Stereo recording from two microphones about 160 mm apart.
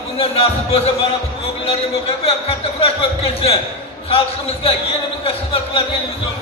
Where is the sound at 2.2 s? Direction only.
35° left (ahead or behind).